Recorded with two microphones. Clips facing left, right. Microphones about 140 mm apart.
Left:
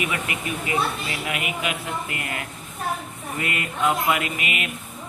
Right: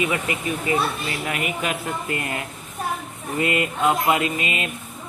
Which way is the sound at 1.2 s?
40° right (ahead or behind).